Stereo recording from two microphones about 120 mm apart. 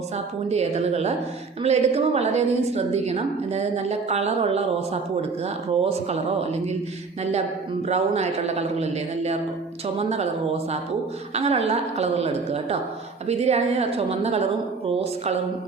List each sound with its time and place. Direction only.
0.5 s a woman's voice: 65° right (ahead or behind)
5.8 s a woman's voice: 60° right (ahead or behind)
7.9 s a woman's voice: 65° right (ahead or behind)
11.3 s a woman's voice: 60° right (ahead or behind)